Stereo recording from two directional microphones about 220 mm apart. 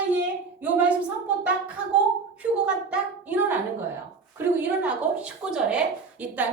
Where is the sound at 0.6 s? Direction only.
5° right (ahead or behind).